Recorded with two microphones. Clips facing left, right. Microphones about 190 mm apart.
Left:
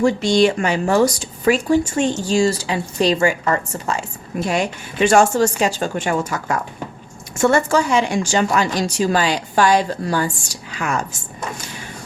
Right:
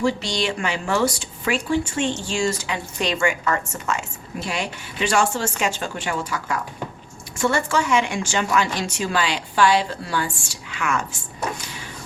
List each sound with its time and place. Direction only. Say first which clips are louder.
0.0 s a woman's voice: left 8 dB; 50° left (ahead or behind)
4.4 s a woman's voice: left 7 dB; 45° left (ahead or behind)